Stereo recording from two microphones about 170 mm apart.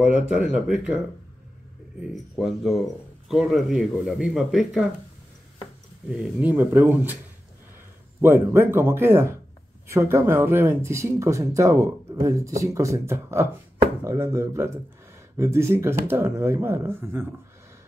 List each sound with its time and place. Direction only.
0.0 s speech: 5° right (ahead or behind)
6.0 s speech: 10° right (ahead or behind)
8.2 s speech: 15° right (ahead or behind)